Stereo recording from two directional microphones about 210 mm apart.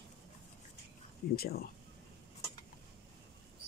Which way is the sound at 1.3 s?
45° left (ahead or behind).